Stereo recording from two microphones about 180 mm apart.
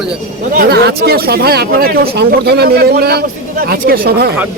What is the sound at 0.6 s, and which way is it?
Speech, 60° right (ahead or behind).